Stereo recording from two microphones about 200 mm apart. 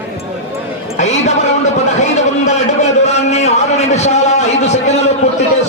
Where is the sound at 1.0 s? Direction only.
35° left (ahead or behind).